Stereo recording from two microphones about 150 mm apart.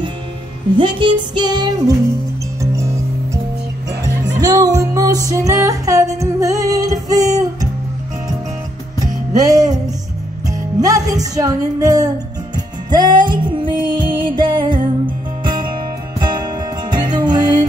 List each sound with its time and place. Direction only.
0.7 s music: 35° right (ahead or behind)
4.4 s music: 25° right (ahead or behind)
9.0 s music: 25° right (ahead or behind)
10.8 s music: 25° right (ahead or behind)